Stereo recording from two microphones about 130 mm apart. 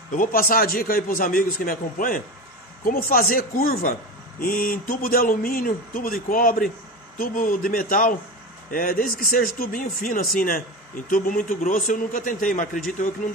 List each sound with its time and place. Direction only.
0.1 s a man's voice: 90° left